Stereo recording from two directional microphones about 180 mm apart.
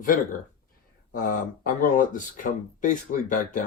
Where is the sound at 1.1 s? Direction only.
50° left (ahead or behind).